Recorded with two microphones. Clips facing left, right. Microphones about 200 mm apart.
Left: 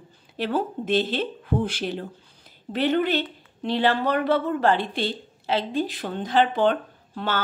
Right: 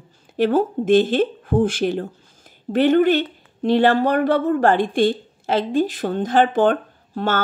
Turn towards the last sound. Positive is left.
turn(degrees=-45)  # may be behind; listen again after turning